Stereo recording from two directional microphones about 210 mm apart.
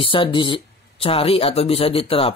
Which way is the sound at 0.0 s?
25° left (ahead or behind).